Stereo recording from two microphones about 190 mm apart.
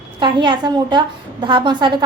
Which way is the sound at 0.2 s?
25° right (ahead or behind).